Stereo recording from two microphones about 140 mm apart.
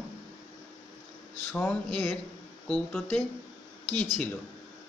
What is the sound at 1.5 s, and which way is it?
Speech, 5° left (ahead or behind).